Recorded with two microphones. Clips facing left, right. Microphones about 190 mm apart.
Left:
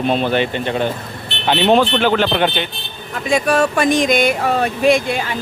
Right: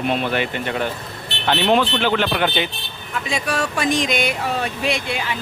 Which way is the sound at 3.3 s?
50° left (ahead or behind).